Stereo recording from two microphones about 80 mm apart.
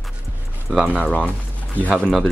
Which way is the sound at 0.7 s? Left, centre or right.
Centre.